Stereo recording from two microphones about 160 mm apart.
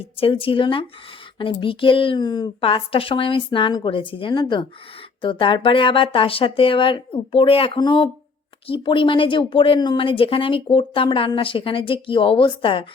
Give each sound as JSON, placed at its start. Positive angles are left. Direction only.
{"t": 0.0, "sound": "speech", "side_deg": 35}